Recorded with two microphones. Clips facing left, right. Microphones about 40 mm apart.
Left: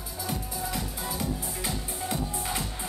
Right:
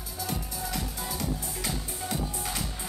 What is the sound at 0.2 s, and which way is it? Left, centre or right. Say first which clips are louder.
Music: left 1 dB; centre.